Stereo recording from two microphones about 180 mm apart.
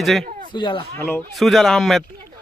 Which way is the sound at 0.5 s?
25° left (ahead or behind).